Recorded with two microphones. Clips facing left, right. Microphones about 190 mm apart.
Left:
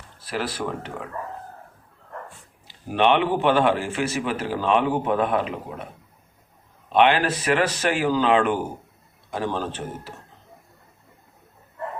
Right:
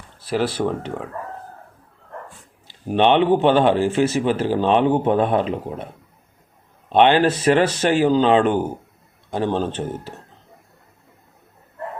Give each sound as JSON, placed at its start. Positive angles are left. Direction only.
{"t": 0.3, "sound": "speech", "side_deg": -30}
{"t": 2.9, "sound": "speech", "side_deg": -30}
{"t": 6.9, "sound": "speech", "side_deg": -30}